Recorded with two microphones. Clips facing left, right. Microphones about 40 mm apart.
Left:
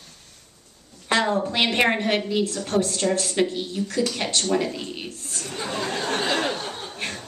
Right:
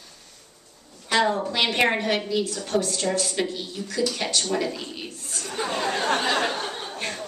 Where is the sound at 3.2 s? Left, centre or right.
Centre.